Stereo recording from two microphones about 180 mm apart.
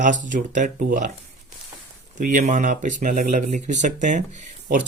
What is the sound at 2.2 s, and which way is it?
Speech, 50° right (ahead or behind).